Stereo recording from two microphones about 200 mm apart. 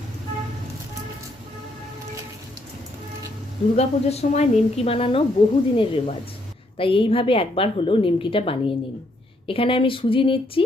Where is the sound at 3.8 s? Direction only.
30° left (ahead or behind).